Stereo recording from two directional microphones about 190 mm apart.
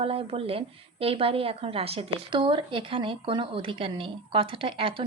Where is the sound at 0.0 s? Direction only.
30° right (ahead or behind).